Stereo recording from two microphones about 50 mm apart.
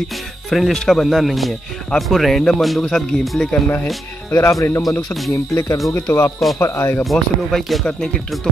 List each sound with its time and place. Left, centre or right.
0.5 s speech: centre
4.3 s speech: left
5.3 s speech: left
5.9 s speech: left
6.6 s speech: left
7.1 s speech: centre